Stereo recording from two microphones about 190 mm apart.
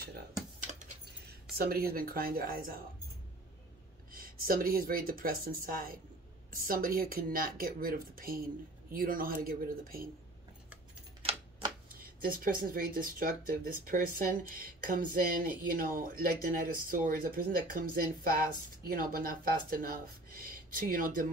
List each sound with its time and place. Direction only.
0.7 s keys jangling: 40° right (ahead or behind)
1.6 s speech: 55° right (ahead or behind)
4.1 s speech: 50° right (ahead or behind)
11.9 s speech: 50° right (ahead or behind)